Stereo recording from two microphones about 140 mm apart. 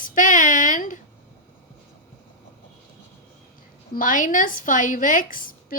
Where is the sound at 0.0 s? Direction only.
65° left (ahead or behind).